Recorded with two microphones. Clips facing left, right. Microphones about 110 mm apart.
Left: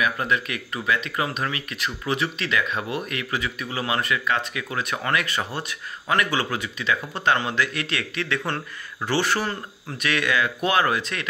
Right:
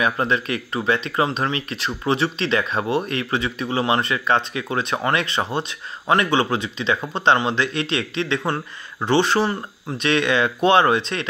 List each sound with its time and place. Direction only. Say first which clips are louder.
0.0 s speech: right 3 dB; 30° right (ahead or behind)